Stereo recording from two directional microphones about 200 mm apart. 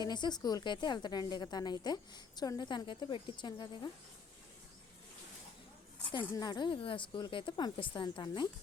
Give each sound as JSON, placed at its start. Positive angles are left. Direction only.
{"t": 0.0, "sound": "a woman's voice", "side_deg": 20}
{"t": 6.1, "sound": "a woman's voice", "side_deg": 20}